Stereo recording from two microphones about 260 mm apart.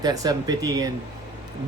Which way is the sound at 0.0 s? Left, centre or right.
Centre.